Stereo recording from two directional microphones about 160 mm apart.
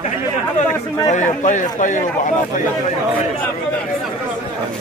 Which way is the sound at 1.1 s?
50° left (ahead or behind).